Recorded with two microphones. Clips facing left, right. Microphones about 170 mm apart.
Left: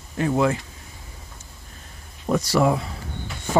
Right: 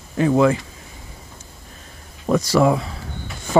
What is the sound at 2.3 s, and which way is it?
Speech, 90° right.